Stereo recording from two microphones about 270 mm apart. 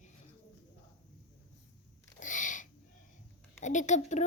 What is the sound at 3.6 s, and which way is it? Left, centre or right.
Speech, left.